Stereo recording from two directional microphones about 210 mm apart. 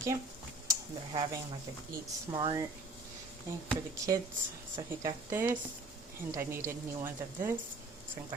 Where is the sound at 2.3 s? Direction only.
20° right (ahead or behind).